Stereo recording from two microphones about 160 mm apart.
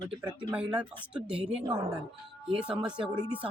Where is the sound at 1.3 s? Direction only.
35° right (ahead or behind).